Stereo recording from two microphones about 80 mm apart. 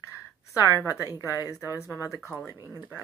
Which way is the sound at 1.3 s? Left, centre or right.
Left.